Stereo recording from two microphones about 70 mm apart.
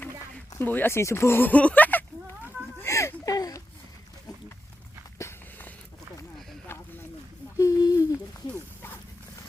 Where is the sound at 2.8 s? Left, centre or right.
Left.